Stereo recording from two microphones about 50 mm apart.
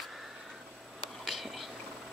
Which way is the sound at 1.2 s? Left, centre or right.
Centre.